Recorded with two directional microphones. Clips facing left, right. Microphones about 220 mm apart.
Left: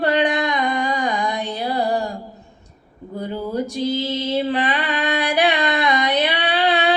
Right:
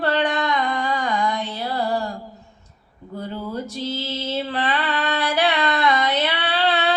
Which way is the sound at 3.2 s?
15° left (ahead or behind).